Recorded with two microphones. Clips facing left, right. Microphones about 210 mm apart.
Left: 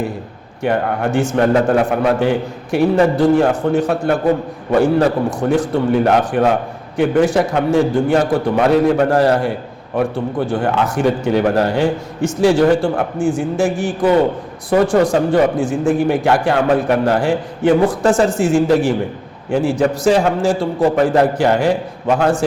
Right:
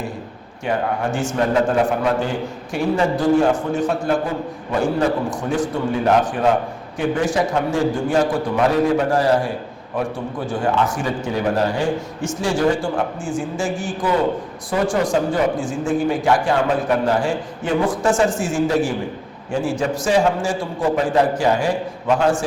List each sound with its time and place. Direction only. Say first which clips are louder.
0.6 s a man's voice: left 4 dB; 60° left (ahead or behind)